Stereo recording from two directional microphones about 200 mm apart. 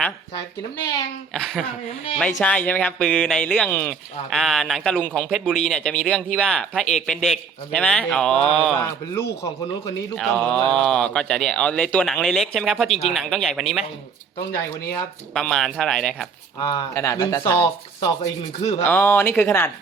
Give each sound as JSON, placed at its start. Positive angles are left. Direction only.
{"t": 1.3, "sound": "speech", "side_deg": 0}
{"t": 10.2, "sound": "speech", "side_deg": 5}
{"t": 12.9, "sound": "speech", "side_deg": 30}
{"t": 13.1, "sound": "speech", "side_deg": 0}
{"t": 15.3, "sound": "speech", "side_deg": 0}
{"t": 16.6, "sound": "speech", "side_deg": 20}